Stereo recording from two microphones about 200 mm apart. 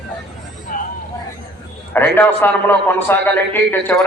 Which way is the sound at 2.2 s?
10° left (ahead or behind).